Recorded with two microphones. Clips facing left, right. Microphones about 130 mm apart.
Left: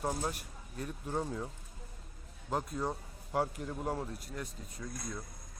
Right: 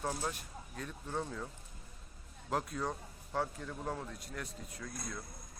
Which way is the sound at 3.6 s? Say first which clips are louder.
Left 4 dB; 40° left (ahead or behind).